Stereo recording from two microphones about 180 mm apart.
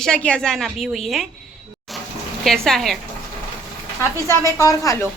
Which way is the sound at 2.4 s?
Centre (ahead or behind).